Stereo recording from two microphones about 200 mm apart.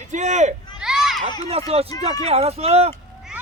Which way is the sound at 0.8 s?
Centre (ahead or behind).